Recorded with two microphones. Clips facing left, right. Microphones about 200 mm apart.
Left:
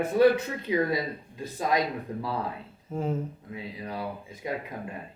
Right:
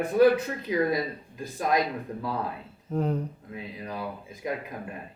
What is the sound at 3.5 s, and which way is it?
Speech, 25° left (ahead or behind).